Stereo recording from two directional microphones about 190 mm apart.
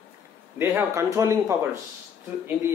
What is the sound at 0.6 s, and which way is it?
Speech, 15° right (ahead or behind).